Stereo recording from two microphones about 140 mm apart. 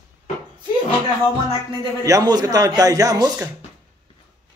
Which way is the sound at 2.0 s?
25° right (ahead or behind).